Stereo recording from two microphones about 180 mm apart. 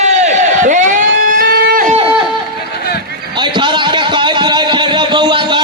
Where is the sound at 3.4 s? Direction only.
25° right (ahead or behind).